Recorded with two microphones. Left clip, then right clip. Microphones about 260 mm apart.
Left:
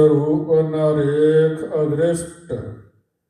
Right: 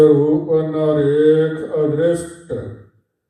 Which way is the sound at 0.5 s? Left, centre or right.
Left.